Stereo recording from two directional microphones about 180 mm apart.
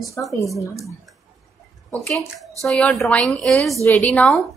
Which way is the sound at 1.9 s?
10° left (ahead or behind).